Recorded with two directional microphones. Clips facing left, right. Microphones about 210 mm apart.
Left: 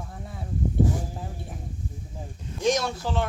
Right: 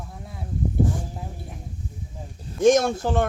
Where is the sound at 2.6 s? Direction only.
50° right (ahead or behind).